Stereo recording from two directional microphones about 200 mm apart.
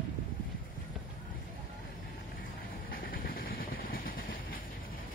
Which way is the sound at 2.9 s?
45° left (ahead or behind).